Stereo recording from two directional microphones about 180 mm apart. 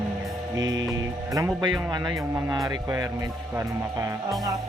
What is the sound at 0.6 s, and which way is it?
Music, 90° right.